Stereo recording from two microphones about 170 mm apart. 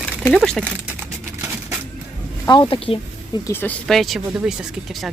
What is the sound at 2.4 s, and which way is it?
Speech, 25° left (ahead or behind).